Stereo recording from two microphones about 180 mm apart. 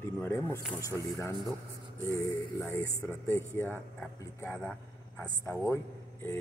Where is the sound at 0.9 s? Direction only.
10° left (ahead or behind).